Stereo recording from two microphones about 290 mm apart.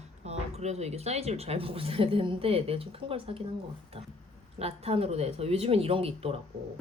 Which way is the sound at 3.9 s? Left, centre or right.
Centre.